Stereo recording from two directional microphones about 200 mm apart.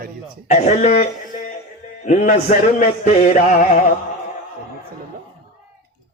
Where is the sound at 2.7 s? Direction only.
35° left (ahead or behind).